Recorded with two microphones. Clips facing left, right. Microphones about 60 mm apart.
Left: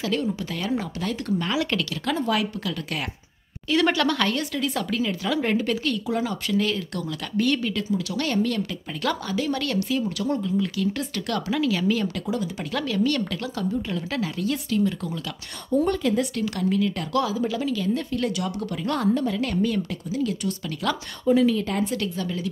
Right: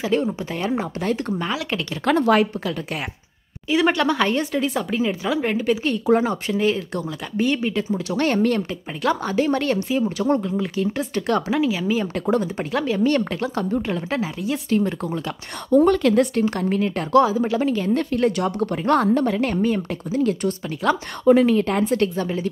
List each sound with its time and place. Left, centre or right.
0.0 s speech: right
1.4 s speech: centre
2.0 s speech: right
2.6 s speech: right
3.6 s speech: centre
5.4 s speech: centre
6.0 s speech: right
10.6 s speech: right
11.6 s speech: centre
14.7 s speech: right
15.7 s a woman's voice: right
16.3 s speech: right
21.3 s speech: right